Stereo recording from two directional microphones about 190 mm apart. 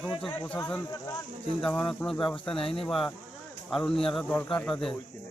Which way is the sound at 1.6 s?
5° left (ahead or behind).